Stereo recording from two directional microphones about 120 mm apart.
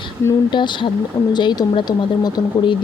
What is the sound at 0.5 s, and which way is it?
Speech, 40° left (ahead or behind).